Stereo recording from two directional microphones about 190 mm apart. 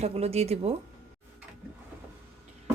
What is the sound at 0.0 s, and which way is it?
Speech, 35° right (ahead or behind).